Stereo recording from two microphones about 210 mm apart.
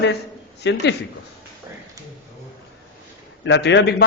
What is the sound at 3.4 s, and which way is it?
Speech, 55° left (ahead or behind).